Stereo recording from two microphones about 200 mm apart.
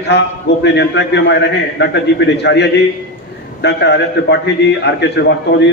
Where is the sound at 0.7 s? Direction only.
60° left (ahead or behind).